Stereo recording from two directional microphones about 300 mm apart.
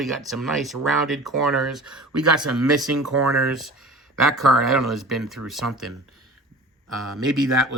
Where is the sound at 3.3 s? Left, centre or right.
Centre.